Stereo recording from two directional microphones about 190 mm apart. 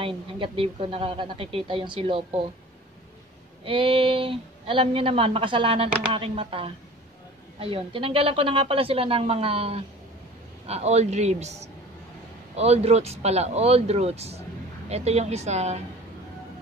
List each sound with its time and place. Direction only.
0.0 s a woman's voice: 30° right (ahead or behind)
3.6 s a woman's voice: 30° right (ahead or behind)